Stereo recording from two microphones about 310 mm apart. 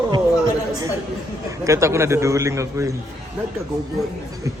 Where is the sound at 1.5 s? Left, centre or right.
Centre.